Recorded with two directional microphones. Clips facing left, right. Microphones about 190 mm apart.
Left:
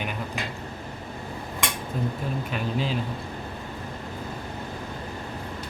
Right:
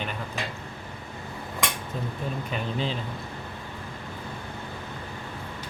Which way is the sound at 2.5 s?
5° left (ahead or behind).